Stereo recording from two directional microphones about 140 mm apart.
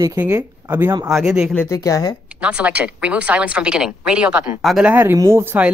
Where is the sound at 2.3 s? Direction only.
10° right (ahead or behind).